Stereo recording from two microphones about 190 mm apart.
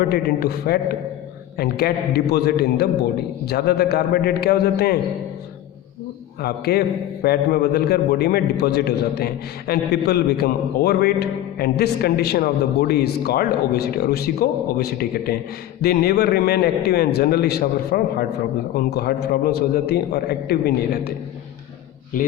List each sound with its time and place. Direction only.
0.0 s a man's voice: 55° left (ahead or behind)
6.4 s a man's voice: 55° left (ahead or behind)
22.1 s speech: 45° left (ahead or behind)